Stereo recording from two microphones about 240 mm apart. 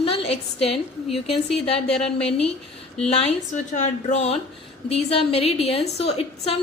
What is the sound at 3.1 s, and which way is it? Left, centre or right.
A woman's voice, left.